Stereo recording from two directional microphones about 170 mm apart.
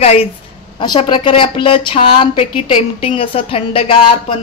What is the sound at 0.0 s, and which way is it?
Speech, 35° left (ahead or behind).